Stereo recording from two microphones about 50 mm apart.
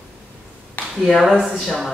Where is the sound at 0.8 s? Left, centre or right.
Left.